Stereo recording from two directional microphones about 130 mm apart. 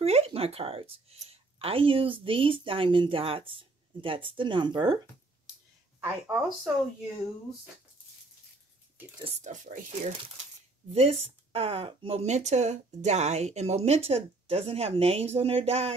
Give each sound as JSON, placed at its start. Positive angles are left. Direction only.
{"t": 0.0, "sound": "speech", "side_deg": -50}
{"t": 6.0, "sound": "speech", "side_deg": -10}
{"t": 9.4, "sound": "speech", "side_deg": -75}
{"t": 10.9, "sound": "speech", "side_deg": -55}